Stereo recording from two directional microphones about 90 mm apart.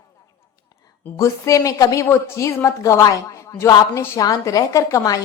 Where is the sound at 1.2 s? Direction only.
35° left (ahead or behind).